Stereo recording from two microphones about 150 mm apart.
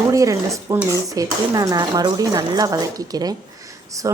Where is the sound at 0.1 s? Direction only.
20° right (ahead or behind).